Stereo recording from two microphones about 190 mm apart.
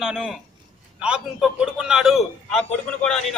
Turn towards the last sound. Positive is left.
turn(degrees=5)  # may be behind; listen again after turning